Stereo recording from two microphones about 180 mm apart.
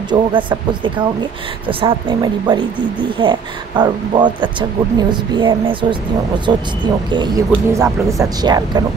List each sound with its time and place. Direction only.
0.1 s speech: 25° right (ahead or behind)